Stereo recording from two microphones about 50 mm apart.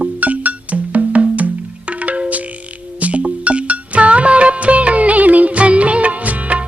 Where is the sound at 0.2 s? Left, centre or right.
Right.